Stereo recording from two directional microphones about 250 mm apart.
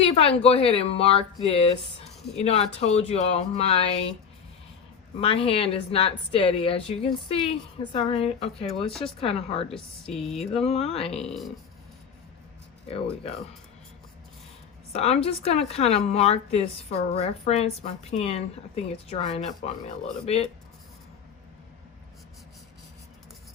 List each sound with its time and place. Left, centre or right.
0.0 s a woman's voice: left
5.2 s a woman's voice: left
9.7 s speech: centre
10.5 s a woman's voice: left
11.3 s speech: centre
14.9 s a woman's voice: left